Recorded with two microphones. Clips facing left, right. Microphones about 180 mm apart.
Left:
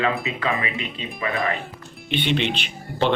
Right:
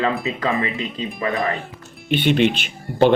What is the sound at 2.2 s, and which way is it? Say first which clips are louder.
Speech: right 7 dB; 45° right (ahead or behind).